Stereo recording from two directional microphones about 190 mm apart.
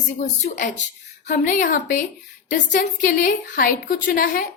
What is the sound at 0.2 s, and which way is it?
A woman's voice, 40° left (ahead or behind).